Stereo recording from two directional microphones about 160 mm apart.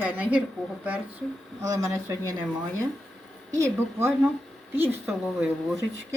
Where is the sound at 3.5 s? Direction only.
15° right (ahead or behind).